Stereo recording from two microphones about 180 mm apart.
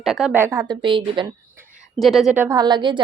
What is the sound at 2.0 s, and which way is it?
Speech, centre (ahead or behind).